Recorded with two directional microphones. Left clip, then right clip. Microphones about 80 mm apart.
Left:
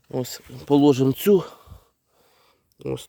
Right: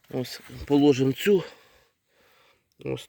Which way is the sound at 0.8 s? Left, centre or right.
Left.